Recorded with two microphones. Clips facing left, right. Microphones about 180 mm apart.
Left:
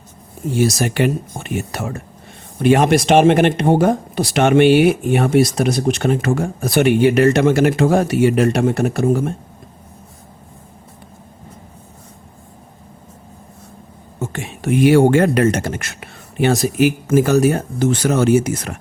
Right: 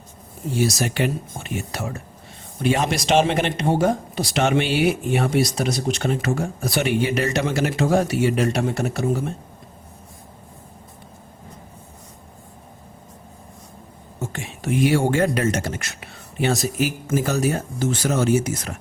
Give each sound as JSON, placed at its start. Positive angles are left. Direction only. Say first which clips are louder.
{"t": 0.6, "sound": "speech", "louder": "left 5 dB", "side_deg": 55}
{"t": 14.2, "sound": "speech", "louder": "left 5 dB", "side_deg": 60}